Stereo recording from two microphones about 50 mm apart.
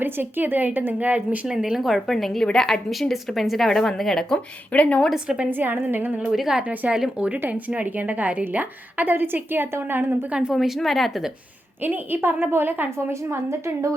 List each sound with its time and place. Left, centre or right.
0.0 s a woman's voice: right
1.5 s speech: centre
2.9 s speech: centre
4.7 s a woman's voice: left
5.0 s a woman's voice: centre
5.5 s a woman's voice: right
6.2 s speech: centre
6.6 s speech: right
6.9 s a woman's voice: centre
7.3 s a woman's voice: right
10.5 s speech: centre
11.8 s a woman's voice: right